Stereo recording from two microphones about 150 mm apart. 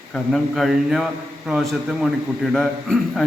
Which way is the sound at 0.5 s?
Centre (ahead or behind).